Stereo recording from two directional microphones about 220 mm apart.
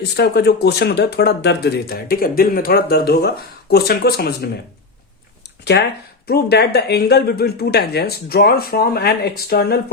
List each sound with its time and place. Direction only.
0.0 s speech: 50° left (ahead or behind)
5.7 s speech: 50° left (ahead or behind)